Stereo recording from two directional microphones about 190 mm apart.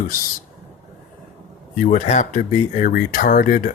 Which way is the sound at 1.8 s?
45° left (ahead or behind).